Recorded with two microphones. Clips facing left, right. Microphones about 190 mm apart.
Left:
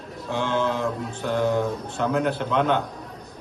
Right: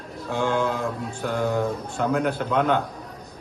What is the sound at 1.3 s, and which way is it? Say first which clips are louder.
Speech: left 2 dB; centre (ahead or behind).